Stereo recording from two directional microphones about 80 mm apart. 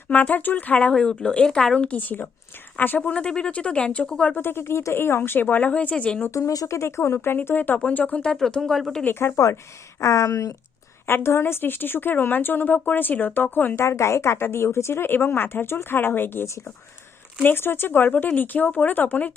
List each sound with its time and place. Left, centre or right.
0.1 s speech: centre
4.4 s speech: left; by 6.2 s centre
6.3 s speech: left; by 9.0 s centre
9.0 s speech: left
10.0 s speech: left
11.0 s speech: left
13.8 s speech: left